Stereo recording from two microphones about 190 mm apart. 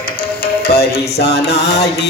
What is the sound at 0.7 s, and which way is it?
Music, 55° left (ahead or behind).